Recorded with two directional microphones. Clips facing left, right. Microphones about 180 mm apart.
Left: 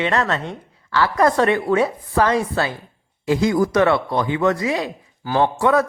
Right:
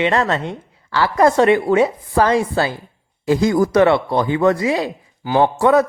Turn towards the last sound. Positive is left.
turn(degrees=-35)  # may be behind; listen again after turning